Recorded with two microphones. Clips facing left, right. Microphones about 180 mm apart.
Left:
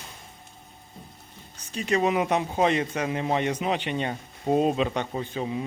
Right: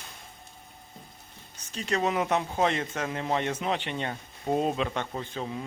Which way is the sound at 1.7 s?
15° left (ahead or behind).